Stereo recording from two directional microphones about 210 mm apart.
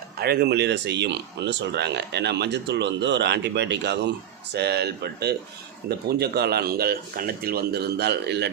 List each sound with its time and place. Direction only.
0.2 s speech: 50° right (ahead or behind)